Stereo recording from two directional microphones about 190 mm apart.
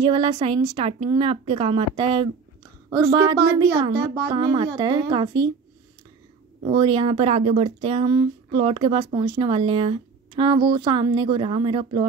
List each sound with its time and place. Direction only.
0.0 s speech: 25° right (ahead or behind)
6.6 s speech: 25° right (ahead or behind)